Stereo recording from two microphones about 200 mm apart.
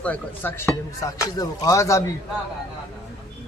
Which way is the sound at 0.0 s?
10° left (ahead or behind).